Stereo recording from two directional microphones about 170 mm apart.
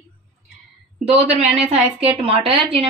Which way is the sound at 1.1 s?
40° right (ahead or behind).